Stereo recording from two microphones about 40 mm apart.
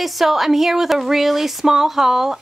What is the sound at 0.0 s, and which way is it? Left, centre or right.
Speech, centre.